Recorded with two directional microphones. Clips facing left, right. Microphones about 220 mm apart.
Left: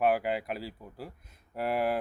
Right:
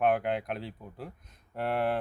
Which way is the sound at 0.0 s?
5° left (ahead or behind).